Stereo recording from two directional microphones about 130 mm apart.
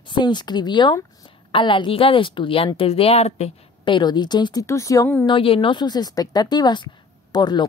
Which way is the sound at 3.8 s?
35° left (ahead or behind).